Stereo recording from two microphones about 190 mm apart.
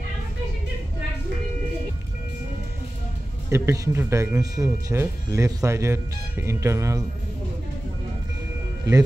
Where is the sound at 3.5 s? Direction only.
15° right (ahead or behind).